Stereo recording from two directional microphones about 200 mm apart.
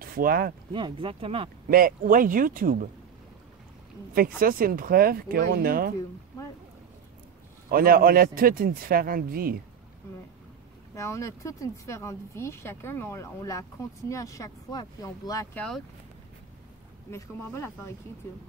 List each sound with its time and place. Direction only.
0.0 s speech: 45° right (ahead or behind)
0.7 s speech: 25° right (ahead or behind)
1.7 s speech: 45° right (ahead or behind)
4.1 s speech: 45° right (ahead or behind)
7.7 s speech: 45° right (ahead or behind)
11.0 s speech: 15° left (ahead or behind)
17.1 s speech: 10° left (ahead or behind)